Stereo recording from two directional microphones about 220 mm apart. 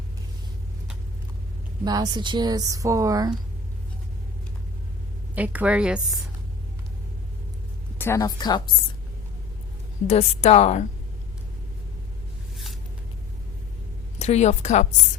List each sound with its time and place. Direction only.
1.8 s speech: 20° right (ahead or behind)
5.3 s a woman's voice: 5° right (ahead or behind)
7.9 s a woman's voice: 10° left (ahead or behind)
10.1 s a woman's voice: 30° left (ahead or behind)
14.2 s speech: 30° left (ahead or behind)